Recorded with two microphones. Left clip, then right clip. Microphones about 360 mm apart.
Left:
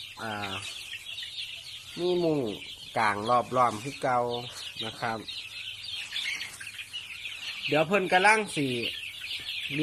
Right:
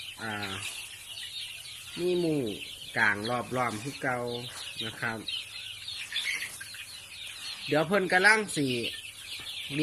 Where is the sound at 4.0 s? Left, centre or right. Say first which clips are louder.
Left 5 dB; left.